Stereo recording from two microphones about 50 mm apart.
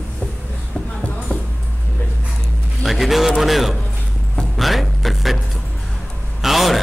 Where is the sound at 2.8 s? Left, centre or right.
Centre.